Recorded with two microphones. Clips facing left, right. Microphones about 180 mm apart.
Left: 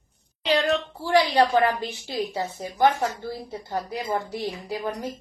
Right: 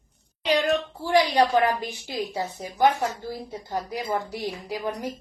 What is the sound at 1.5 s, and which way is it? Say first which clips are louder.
Speech: even; 10° left (ahead or behind).